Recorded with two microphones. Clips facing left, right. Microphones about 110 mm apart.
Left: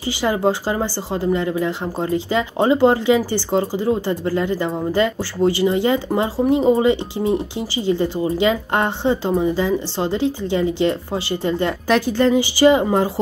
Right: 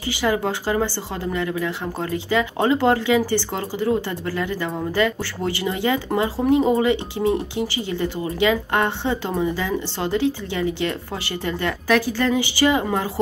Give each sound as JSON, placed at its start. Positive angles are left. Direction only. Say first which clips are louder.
{"t": 0.2, "sound": "speech", "louder": "left 3 dB", "side_deg": 20}